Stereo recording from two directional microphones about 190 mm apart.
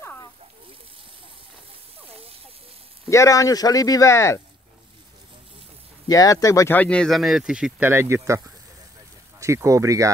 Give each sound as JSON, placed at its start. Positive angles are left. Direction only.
{"t": 0.0, "sound": "a sound", "side_deg": 15}
{"t": 3.1, "sound": "speech", "side_deg": 15}
{"t": 6.0, "sound": "speech", "side_deg": 20}
{"t": 9.4, "sound": "speech", "side_deg": -15}